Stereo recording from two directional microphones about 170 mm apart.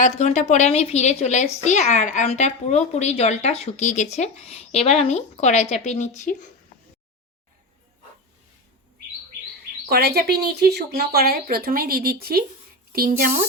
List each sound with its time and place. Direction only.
0.0 s a woman's voice: 40° left (ahead or behind)
9.9 s speech: 65° right (ahead or behind)